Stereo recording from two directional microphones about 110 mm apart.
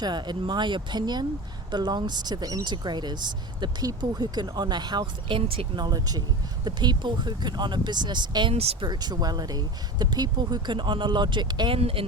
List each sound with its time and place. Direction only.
0.0 s speech: 40° right (ahead or behind)
5.4 s speech: 55° right (ahead or behind)
11.8 s speech: 60° right (ahead or behind)